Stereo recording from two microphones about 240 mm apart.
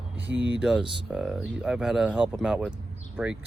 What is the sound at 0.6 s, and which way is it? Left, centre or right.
Speech, centre.